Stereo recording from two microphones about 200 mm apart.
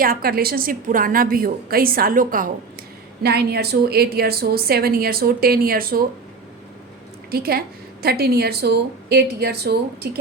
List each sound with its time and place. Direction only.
0.0 s a woman's voice: 45° right (ahead or behind)
3.2 s a woman's voice: 55° right (ahead or behind)
7.3 s a woman's voice: 50° right (ahead or behind)